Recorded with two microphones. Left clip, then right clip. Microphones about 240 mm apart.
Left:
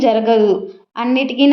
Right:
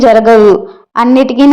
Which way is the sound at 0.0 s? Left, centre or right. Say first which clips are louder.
Right 9 dB; right.